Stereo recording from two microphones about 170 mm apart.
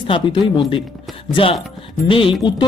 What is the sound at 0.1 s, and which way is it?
Speech, 30° left (ahead or behind).